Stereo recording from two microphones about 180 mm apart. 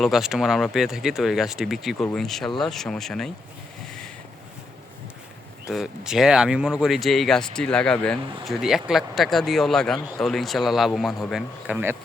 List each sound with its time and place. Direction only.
0.0 s speech: centre (ahead or behind)
5.7 s speech: 5° right (ahead or behind)